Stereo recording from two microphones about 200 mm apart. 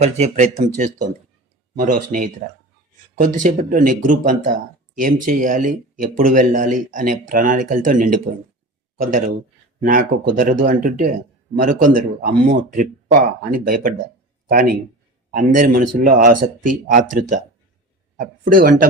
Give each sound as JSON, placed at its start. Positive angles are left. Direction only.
{"t": 0.0, "sound": "speech", "side_deg": -35}